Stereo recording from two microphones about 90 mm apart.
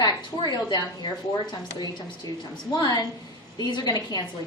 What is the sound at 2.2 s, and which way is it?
A woman's voice, 45° left (ahead or behind).